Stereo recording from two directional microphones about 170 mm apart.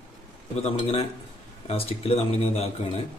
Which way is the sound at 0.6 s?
35° left (ahead or behind).